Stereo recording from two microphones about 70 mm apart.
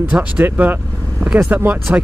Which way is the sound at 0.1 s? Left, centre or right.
Right.